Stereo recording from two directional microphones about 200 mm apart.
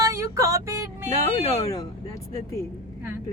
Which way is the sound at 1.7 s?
15° left (ahead or behind).